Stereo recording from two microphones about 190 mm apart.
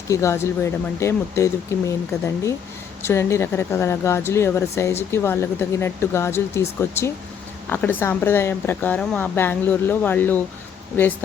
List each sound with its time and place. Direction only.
0.1 s speech: 15° left (ahead or behind)